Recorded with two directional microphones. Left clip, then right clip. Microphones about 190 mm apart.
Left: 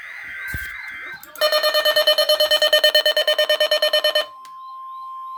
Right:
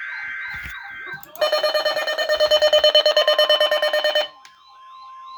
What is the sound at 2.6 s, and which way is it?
Alarm clock, 25° left (ahead or behind).